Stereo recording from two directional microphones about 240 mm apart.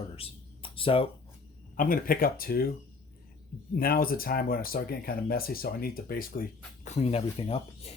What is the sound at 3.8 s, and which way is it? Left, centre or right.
Speech, left.